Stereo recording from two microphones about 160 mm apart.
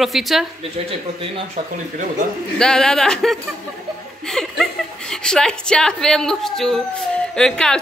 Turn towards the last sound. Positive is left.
turn(degrees=5)  # may be behind; listen again after turning